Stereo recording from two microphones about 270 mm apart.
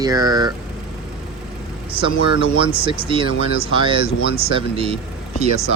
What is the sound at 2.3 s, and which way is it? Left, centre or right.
Speech, centre.